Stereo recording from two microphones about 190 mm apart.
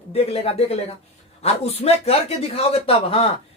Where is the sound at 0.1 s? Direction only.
30° left (ahead or behind).